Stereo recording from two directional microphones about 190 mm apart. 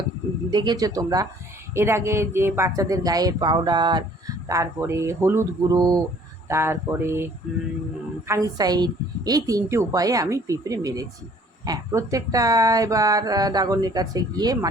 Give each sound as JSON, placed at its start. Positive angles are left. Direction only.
{"t": 0.5, "sound": "speech", "side_deg": -20}
{"t": 8.3, "sound": "speech", "side_deg": -20}